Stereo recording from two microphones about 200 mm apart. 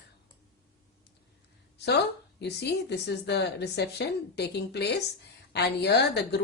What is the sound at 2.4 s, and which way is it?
Speech, 55° left (ahead or behind).